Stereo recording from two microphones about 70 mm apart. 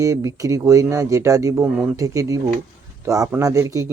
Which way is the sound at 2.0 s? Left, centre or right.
Right.